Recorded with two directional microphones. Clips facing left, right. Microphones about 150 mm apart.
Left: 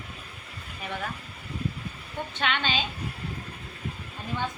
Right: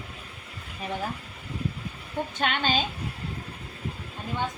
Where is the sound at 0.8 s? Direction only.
30° right (ahead or behind).